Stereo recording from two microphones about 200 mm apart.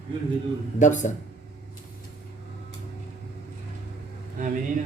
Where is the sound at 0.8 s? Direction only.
40° left (ahead or behind).